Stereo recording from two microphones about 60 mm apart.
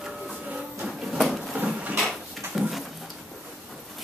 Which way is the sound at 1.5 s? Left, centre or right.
Right.